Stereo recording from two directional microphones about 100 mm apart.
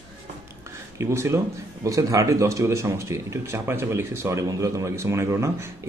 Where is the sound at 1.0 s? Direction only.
30° right (ahead or behind).